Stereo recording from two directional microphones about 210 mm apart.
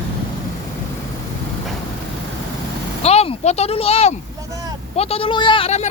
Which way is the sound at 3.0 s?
30° left (ahead or behind).